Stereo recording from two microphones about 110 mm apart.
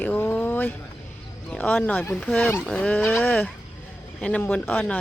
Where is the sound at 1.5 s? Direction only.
15° left (ahead or behind).